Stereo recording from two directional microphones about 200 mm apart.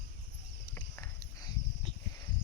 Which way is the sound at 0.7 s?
15° left (ahead or behind).